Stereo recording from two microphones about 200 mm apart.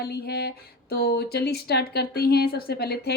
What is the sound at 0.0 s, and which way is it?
Speech, 50° left (ahead or behind).